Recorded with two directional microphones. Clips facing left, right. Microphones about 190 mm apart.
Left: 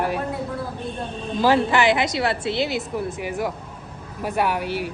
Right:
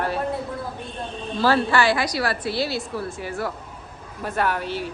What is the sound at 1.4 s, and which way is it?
A woman's voice, 15° left (ahead or behind).